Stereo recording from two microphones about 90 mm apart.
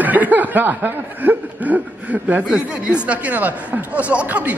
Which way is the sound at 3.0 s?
20° right (ahead or behind).